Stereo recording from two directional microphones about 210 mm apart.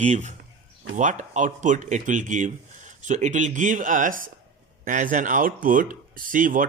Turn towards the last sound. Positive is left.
turn(degrees=-40)  # may be behind; listen again after turning